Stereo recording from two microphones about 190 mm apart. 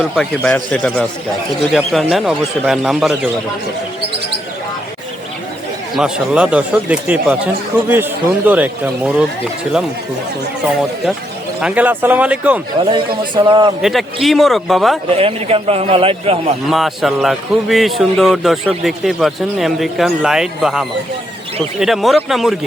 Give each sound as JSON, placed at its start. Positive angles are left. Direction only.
{"t": 0.0, "sound": "a man's voice", "side_deg": 5}
{"t": 5.9, "sound": "a man's voice", "side_deg": -5}
{"t": 11.6, "sound": "a man's voice", "side_deg": -10}
{"t": 12.8, "sound": "a man's voice", "side_deg": -25}
{"t": 13.8, "sound": "a man's voice", "side_deg": 0}
{"t": 15.1, "sound": "a man's voice", "side_deg": -30}
{"t": 16.6, "sound": "a man's voice", "side_deg": 0}